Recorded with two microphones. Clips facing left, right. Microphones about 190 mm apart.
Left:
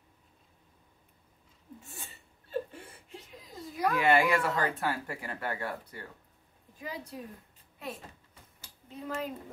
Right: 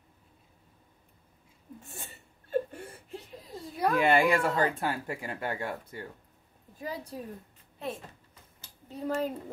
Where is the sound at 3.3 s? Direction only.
30° right (ahead or behind).